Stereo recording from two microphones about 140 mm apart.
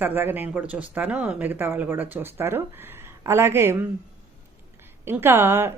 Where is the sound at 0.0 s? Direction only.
15° right (ahead or behind).